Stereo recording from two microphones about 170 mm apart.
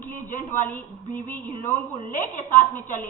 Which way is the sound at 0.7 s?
10° left (ahead or behind).